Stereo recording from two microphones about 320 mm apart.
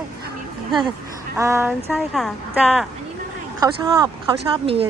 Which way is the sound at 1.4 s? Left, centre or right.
Centre.